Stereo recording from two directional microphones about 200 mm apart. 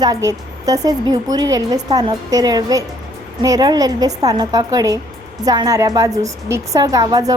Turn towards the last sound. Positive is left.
turn(degrees=-20)  # may be behind; listen again after turning